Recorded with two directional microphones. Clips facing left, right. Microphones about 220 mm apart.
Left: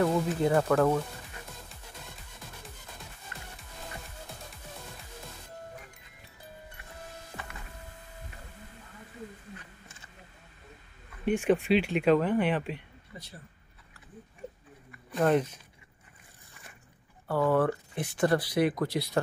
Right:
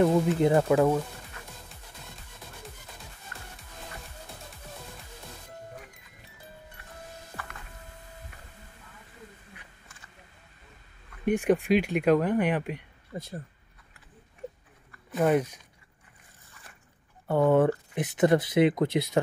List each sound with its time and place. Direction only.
0.0 s speech: 20° right (ahead or behind)
3.3 s music: 20° left (ahead or behind)
11.2 s speech: 15° right (ahead or behind)
13.1 s speech: 50° right (ahead or behind)
15.0 s speech: 5° right (ahead or behind)
17.3 s speech: 20° right (ahead or behind)